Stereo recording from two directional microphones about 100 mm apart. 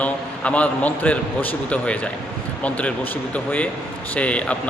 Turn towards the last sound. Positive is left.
turn(degrees=15)  # may be behind; listen again after turning